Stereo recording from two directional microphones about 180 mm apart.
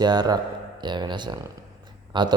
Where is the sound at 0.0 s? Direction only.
20° right (ahead or behind).